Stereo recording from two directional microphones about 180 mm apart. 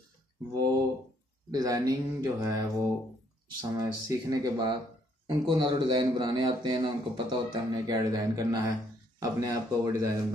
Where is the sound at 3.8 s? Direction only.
20° right (ahead or behind).